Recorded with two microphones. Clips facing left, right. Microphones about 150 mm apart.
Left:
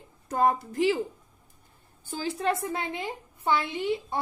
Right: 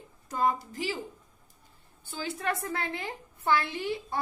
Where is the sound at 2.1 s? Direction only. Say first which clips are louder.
Left 4 dB; 35° left (ahead or behind).